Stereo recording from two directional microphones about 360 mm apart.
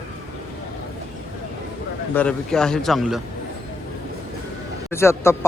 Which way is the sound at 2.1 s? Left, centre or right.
Centre.